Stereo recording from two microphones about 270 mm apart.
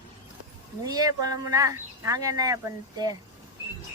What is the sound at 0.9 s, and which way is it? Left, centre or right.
Speech, centre.